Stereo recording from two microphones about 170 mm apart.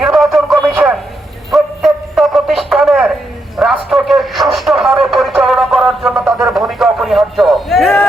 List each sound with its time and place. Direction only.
0.0 s music: centre (ahead or behind)
1.5 s bow-wow: centre (ahead or behind)
3.6 s radio: centre (ahead or behind)